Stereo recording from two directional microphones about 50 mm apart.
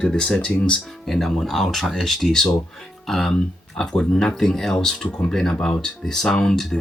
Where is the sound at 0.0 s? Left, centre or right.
Centre.